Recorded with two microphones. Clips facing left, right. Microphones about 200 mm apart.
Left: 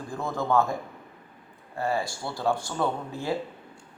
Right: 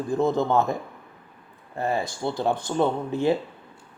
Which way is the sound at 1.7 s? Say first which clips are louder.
Right 2 dB; 20° right (ahead or behind).